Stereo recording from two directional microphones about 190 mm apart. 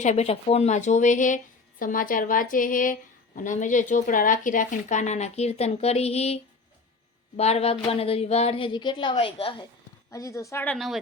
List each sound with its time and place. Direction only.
0.0 s a woman's voice: 35° left (ahead or behind)
10.1 s a woman's voice: 15° left (ahead or behind)